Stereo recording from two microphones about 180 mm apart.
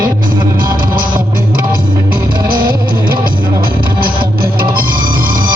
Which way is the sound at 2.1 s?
55° right (ahead or behind).